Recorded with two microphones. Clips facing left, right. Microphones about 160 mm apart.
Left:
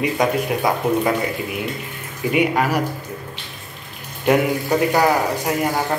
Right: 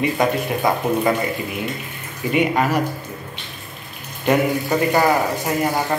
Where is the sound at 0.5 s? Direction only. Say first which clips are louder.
Even; 10° left (ahead or behind).